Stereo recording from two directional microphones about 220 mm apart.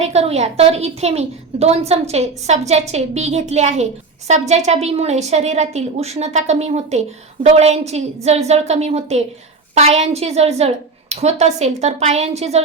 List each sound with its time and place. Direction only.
0.0 s a woman's voice: 30° right (ahead or behind)